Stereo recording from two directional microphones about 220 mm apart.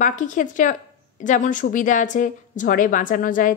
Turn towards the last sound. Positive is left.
turn(degrees=35)  # may be behind; listen again after turning